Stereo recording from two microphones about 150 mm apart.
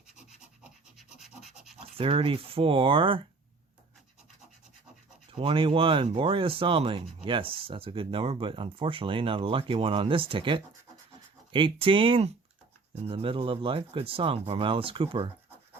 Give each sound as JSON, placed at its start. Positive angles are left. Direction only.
{"t": 0.6, "sound": "scratch", "side_deg": -5}
{"t": 2.0, "sound": "speech", "side_deg": -35}
{"t": 5.4, "sound": "speech", "side_deg": -35}